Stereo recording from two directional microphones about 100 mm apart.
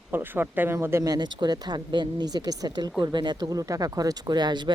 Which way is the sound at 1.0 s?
45° right (ahead or behind).